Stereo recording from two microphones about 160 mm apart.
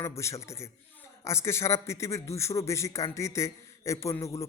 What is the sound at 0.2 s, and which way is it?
A man's voice, 15° left (ahead or behind).